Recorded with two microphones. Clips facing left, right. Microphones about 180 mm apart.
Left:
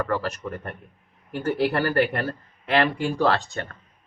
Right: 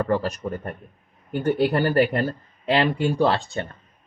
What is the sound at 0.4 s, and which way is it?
Speech, 35° right (ahead or behind).